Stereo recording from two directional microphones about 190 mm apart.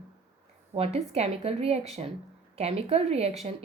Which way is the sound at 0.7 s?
30° right (ahead or behind).